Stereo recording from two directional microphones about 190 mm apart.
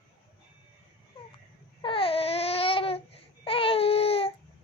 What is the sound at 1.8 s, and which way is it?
Babbling, 30° left (ahead or behind).